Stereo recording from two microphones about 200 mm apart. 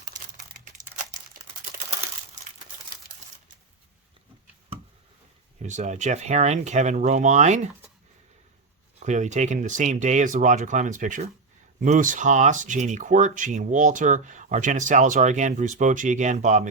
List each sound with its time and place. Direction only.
5.5 s speech: 35° right (ahead or behind)
9.0 s speech: 35° right (ahead or behind)